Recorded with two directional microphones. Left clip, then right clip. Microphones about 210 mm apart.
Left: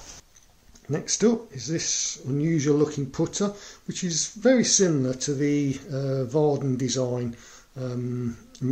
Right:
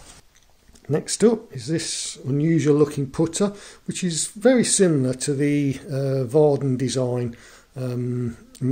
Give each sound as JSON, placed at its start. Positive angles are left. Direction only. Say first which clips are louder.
{"t": 0.8, "sound": "speech", "louder": "right 4 dB", "side_deg": -35}